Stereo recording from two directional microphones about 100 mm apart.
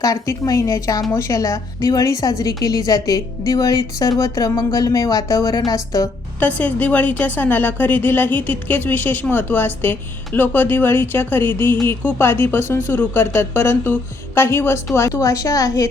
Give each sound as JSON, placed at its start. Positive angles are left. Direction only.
{"t": 0.0, "sound": "a woman's voice", "side_deg": 35}
{"t": 6.4, "sound": "a woman's voice", "side_deg": 15}